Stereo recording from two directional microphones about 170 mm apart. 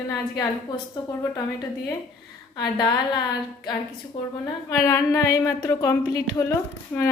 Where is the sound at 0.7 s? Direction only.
25° left (ahead or behind).